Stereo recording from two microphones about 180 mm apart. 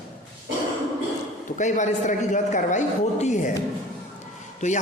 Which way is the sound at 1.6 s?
40° left (ahead or behind).